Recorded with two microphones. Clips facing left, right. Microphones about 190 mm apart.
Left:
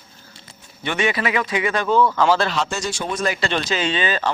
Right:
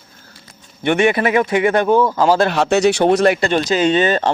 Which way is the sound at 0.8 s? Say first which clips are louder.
Right 7 dB; 55° right (ahead or behind).